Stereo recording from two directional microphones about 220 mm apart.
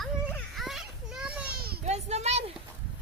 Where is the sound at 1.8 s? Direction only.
30° right (ahead or behind).